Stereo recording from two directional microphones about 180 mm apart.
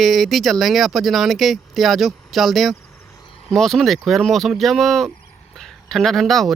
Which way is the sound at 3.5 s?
Centre (ahead or behind).